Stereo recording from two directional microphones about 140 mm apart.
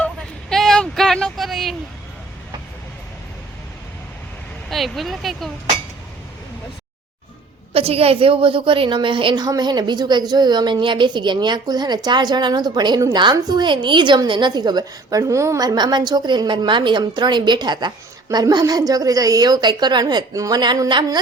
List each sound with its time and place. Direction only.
0.0 s a sound: 5° left (ahead or behind)
4.7 s speech: centre (ahead or behind)
7.7 s a woman's voice: 45° right (ahead or behind)